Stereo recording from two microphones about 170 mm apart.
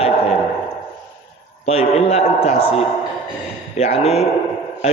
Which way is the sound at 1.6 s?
40° left (ahead or behind).